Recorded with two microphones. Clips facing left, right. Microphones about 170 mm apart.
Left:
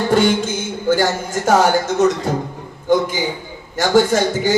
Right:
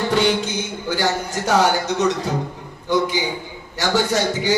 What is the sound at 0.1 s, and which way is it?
A man's voice, 45° left (ahead or behind).